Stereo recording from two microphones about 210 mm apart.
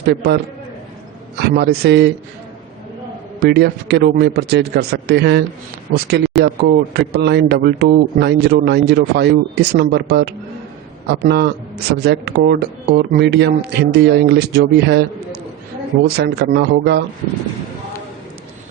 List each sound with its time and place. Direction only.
0.0 s a man's voice: 55° right (ahead or behind)
1.4 s a man's voice: 50° right (ahead or behind)
3.4 s a man's voice: 50° right (ahead or behind)
16.0 s a man's voice: 50° right (ahead or behind)